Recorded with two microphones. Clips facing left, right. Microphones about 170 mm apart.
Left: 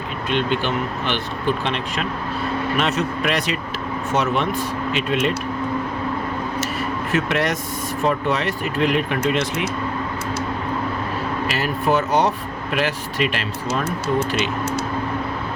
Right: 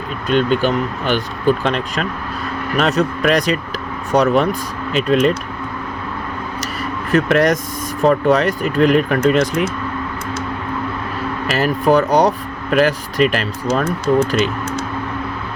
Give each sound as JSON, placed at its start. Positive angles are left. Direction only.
{"t": 0.3, "sound": "speech", "side_deg": -40}
{"t": 7.1, "sound": "speech", "side_deg": -40}
{"t": 11.4, "sound": "speech", "side_deg": -40}